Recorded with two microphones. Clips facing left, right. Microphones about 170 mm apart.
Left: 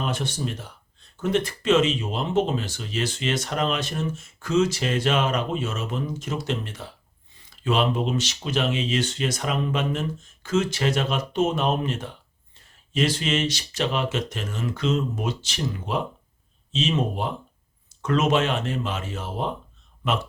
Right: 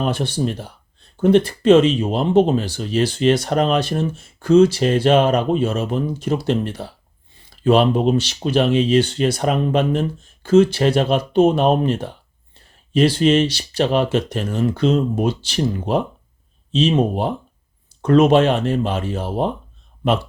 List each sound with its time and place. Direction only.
0.0 s speech: 30° right (ahead or behind)